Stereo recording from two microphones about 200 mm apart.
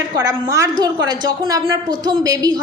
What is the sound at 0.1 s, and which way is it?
A woman's voice, 20° right (ahead or behind).